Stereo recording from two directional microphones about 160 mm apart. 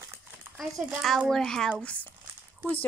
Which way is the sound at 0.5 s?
Centre (ahead or behind).